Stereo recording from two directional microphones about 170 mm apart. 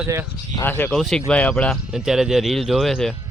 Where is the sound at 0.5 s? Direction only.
10° left (ahead or behind).